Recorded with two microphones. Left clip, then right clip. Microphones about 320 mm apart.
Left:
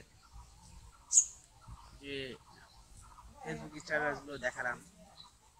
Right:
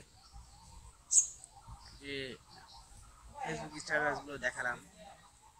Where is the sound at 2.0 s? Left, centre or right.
Centre.